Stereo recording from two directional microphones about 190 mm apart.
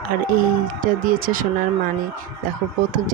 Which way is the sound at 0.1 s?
50° right (ahead or behind).